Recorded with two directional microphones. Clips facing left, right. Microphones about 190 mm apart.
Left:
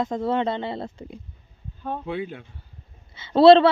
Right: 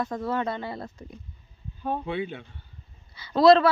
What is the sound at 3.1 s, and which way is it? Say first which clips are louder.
Speech: left 5 dB; 25° left (ahead or behind).